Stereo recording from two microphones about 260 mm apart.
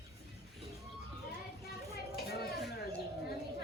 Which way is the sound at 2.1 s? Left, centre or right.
Left.